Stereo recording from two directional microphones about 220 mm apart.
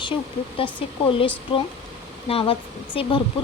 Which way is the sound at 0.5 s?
25° left (ahead or behind).